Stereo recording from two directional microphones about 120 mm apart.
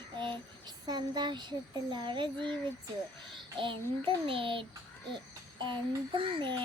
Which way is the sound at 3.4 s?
45° right (ahead or behind).